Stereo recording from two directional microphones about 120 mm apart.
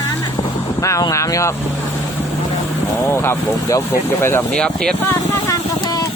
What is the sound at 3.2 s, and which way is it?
Speech, 25° left (ahead or behind).